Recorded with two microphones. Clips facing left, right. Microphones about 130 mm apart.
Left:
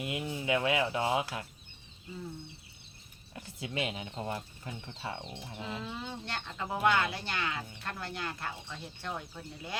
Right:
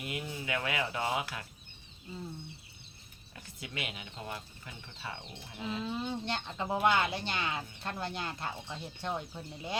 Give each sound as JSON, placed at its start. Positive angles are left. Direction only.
{"t": 0.0, "sound": "speech", "side_deg": 25}
{"t": 3.3, "sound": "speech", "side_deg": 30}
{"t": 5.6, "sound": "speech", "side_deg": -20}